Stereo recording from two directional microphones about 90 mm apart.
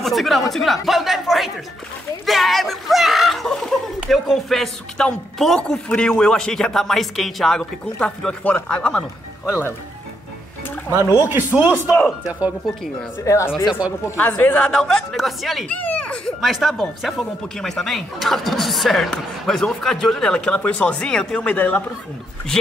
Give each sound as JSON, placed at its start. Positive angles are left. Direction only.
{"t": 0.0, "sound": "speech", "side_deg": 0}
{"t": 11.2, "sound": "speech", "side_deg": -25}
{"t": 13.2, "sound": "speech", "side_deg": 35}
{"t": 13.7, "sound": "speech", "side_deg": -15}
{"t": 14.0, "sound": "a woman's voice", "side_deg": 20}
{"t": 14.7, "sound": "speech", "side_deg": 5}
{"t": 15.7, "sound": "a child's voice", "side_deg": 15}
{"t": 16.3, "sound": "speech", "side_deg": 0}